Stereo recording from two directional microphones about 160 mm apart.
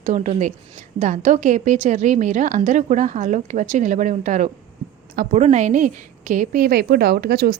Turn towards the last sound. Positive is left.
turn(degrees=-80)